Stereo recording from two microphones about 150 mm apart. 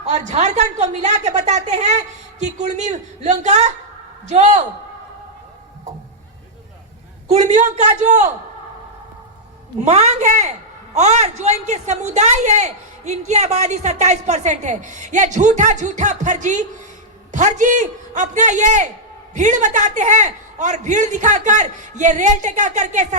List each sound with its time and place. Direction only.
0.0 s a woman's voice: 50° right (ahead or behind)
7.3 s a woman's voice: 50° right (ahead or behind)
9.7 s a woman's voice: 50° right (ahead or behind)